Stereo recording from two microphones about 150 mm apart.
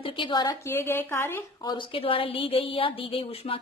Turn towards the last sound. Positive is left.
turn(degrees=40)  # may be behind; listen again after turning